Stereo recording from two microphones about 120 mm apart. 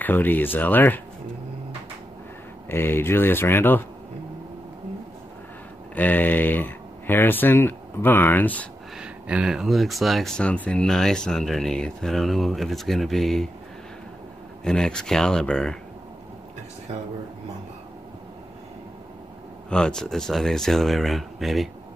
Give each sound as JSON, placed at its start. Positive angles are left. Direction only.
{"t": 0.0, "sound": "speech", "side_deg": 15}
{"t": 2.7, "sound": "speech", "side_deg": 20}
{"t": 5.9, "sound": "speech", "side_deg": 15}
{"t": 8.9, "sound": "speech", "side_deg": -10}
{"t": 14.6, "sound": "speech", "side_deg": 5}
{"t": 19.7, "sound": "speech", "side_deg": 5}